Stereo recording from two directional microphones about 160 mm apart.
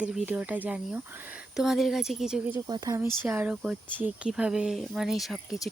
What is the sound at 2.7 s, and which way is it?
Speech, 20° right (ahead or behind).